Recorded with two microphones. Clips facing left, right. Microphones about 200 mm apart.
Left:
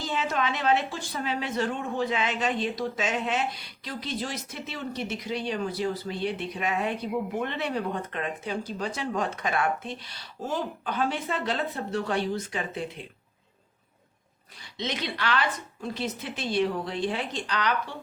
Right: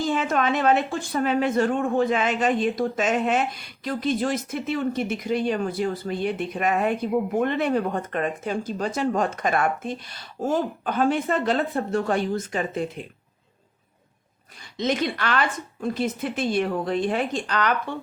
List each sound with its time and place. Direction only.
0.0 s a woman's voice: 50° right (ahead or behind)
14.6 s a woman's voice: 50° right (ahead or behind)